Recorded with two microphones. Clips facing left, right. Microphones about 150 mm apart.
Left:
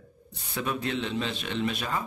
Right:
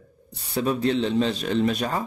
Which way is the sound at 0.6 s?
35° right (ahead or behind).